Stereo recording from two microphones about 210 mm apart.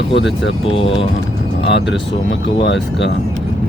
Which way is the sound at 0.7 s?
25° left (ahead or behind).